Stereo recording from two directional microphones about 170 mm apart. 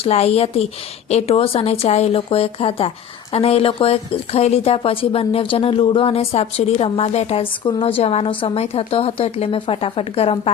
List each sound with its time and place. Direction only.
0.0 s speech: 40° left (ahead or behind)